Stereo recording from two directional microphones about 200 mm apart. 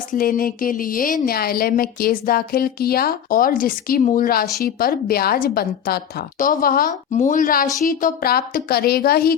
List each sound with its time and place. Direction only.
0.1 s a woman's voice: 45° left (ahead or behind)